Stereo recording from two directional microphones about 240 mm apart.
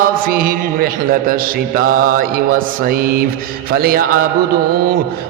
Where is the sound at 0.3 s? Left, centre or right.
Right.